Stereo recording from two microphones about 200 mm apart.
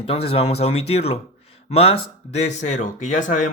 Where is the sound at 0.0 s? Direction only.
30° left (ahead or behind).